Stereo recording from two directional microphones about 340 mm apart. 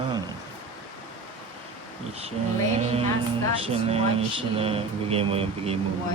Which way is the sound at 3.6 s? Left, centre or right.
Centre.